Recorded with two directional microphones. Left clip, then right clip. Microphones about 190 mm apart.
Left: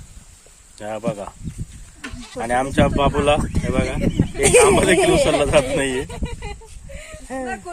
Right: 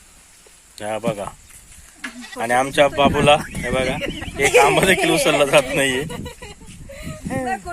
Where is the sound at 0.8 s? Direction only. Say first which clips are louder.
Right 2 dB; 15° right (ahead or behind).